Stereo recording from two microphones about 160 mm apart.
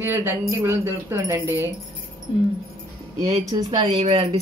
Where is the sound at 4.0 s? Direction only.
40° right (ahead or behind).